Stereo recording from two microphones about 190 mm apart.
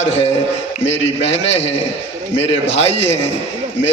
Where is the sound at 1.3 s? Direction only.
35° left (ahead or behind).